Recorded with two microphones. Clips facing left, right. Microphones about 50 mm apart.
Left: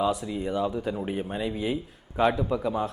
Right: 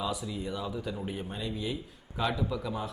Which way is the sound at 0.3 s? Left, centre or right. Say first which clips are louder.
Left 7 dB; left.